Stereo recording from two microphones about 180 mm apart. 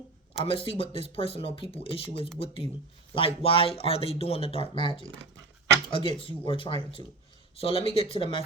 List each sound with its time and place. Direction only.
0.3 s speech: 30° left (ahead or behind)